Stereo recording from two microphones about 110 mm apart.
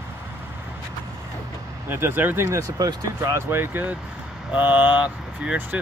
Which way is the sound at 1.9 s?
20° right (ahead or behind).